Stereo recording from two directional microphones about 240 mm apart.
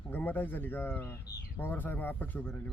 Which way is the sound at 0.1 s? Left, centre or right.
Centre.